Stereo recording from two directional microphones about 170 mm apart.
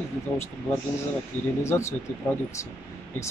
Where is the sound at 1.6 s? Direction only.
15° left (ahead or behind).